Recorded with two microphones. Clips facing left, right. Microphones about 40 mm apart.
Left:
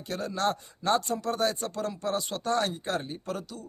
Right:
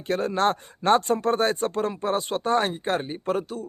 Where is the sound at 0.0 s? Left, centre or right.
Right.